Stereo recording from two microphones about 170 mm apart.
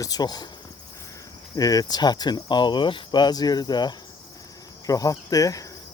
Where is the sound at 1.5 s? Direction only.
20° left (ahead or behind).